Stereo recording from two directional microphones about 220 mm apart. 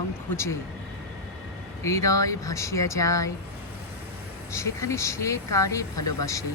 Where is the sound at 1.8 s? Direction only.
15° left (ahead or behind).